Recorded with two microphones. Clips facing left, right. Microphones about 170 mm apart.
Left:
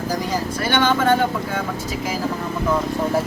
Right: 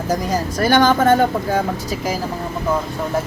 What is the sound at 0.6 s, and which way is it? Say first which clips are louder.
Speech: right 5 dB; 40° right (ahead or behind).